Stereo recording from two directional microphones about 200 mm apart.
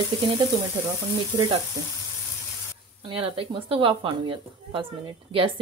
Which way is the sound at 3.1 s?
30° right (ahead or behind).